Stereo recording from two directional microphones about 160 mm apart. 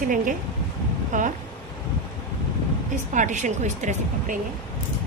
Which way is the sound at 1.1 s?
55° right (ahead or behind).